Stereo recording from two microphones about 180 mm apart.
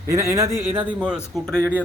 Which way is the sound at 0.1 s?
15° right (ahead or behind).